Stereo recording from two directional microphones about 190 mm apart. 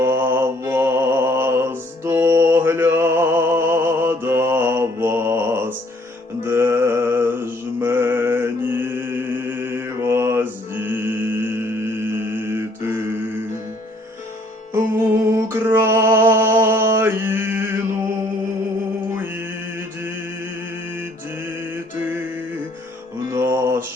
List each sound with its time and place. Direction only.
0.0 s mantra: 10° right (ahead or behind)
15.4 s mantra: 10° right (ahead or behind)
23.3 s music: 15° right (ahead or behind)